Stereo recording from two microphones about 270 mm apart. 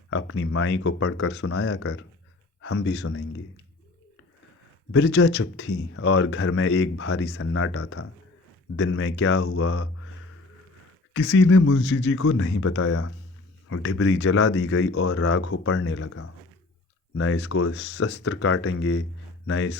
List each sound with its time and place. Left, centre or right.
0.1 s speech: left
2.6 s speech: left
4.9 s speech: left
11.1 s speech: left
13.7 s speech: left
17.2 s speech: left